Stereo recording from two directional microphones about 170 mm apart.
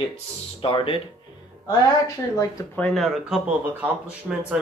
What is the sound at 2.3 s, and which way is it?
Speech, 20° left (ahead or behind).